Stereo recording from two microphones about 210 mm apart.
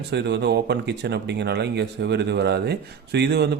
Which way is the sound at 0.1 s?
55° right (ahead or behind).